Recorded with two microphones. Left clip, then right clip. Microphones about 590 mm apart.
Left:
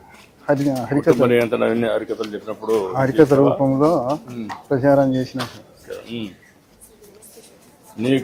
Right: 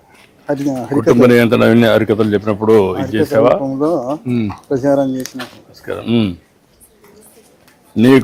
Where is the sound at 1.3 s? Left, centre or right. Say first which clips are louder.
Right 7 dB; right.